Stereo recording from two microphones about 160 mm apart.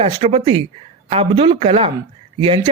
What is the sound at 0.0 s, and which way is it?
A woman's voice, 35° right (ahead or behind).